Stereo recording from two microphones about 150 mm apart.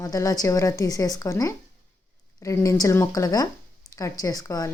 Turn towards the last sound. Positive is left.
turn(degrees=20)  # may be behind; listen again after turning